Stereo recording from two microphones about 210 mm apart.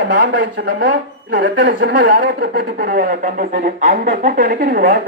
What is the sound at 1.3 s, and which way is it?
Speech, 40° right (ahead or behind).